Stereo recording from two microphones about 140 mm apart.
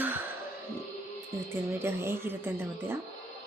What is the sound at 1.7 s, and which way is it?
Speech, 20° right (ahead or behind).